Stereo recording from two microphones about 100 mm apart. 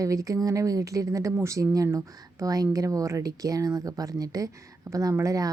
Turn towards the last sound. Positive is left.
turn(degrees=-35)  # may be behind; listen again after turning